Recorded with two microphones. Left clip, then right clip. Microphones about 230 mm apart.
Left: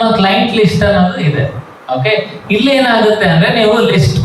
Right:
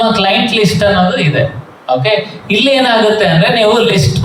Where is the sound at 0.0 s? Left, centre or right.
Right.